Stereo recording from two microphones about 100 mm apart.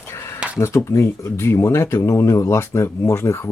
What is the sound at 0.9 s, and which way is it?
Speech, 25° left (ahead or behind).